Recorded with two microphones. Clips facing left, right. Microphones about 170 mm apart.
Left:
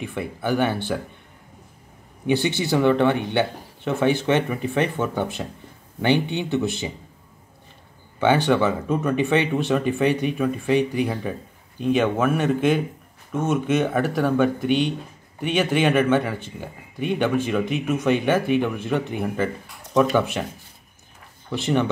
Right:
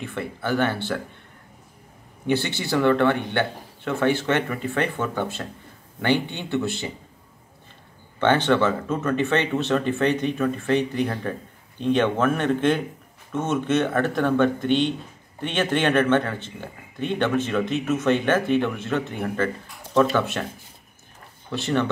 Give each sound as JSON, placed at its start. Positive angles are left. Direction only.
{"t": 0.0, "sound": "a man's voice", "side_deg": 15}
{"t": 2.2, "sound": "a man's voice", "side_deg": 15}
{"t": 8.2, "sound": "a man's voice", "side_deg": 10}
{"t": 21.5, "sound": "a man's voice", "side_deg": 15}